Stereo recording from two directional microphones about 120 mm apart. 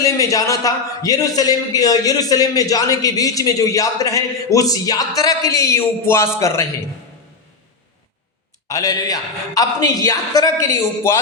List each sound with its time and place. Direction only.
0.0 s a man's voice: 25° left (ahead or behind)
8.6 s a man's voice: 30° left (ahead or behind)